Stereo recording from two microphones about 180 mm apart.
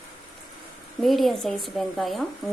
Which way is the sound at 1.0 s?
Centre (ahead or behind).